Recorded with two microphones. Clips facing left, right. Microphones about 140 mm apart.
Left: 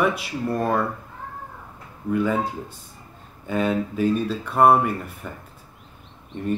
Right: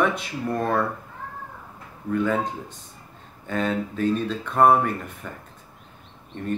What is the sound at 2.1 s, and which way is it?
Speech, 10° left (ahead or behind).